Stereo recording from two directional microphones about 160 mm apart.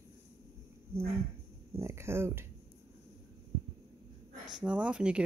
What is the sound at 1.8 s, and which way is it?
Speech, 15° right (ahead or behind).